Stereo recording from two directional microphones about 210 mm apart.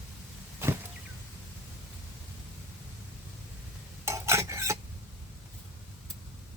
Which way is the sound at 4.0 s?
15° right (ahead or behind).